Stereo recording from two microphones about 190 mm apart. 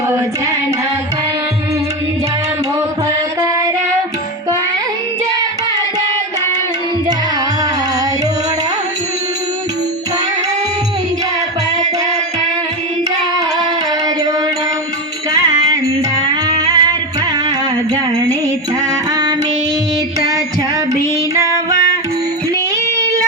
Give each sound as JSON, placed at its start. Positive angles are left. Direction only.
{"t": 16.3, "sound": "music", "side_deg": -20}